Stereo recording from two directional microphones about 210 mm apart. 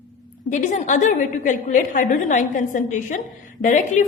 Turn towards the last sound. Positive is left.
turn(degrees=35)  # may be behind; listen again after turning